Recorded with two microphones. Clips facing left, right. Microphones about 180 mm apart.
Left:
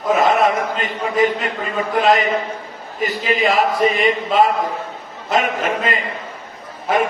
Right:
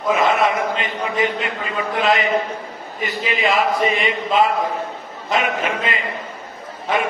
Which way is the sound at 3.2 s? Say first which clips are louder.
Left 2 dB; 40° left (ahead or behind).